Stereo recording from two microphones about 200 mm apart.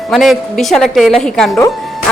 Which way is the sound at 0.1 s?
Centre (ahead or behind).